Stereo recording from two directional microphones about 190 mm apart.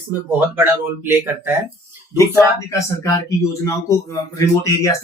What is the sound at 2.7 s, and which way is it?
Speech, 15° left (ahead or behind).